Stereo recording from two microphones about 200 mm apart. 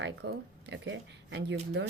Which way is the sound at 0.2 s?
55° right (ahead or behind).